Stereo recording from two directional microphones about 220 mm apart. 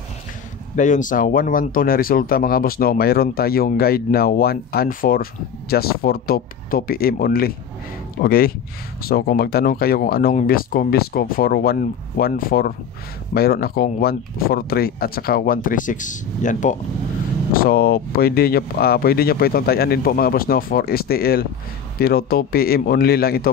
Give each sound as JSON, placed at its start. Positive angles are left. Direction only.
{"t": 0.7, "sound": "speech", "side_deg": 35}